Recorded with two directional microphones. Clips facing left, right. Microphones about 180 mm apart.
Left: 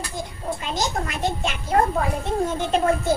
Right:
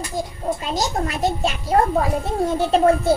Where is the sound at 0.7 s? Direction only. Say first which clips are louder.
Right 1 dB; 35° right (ahead or behind).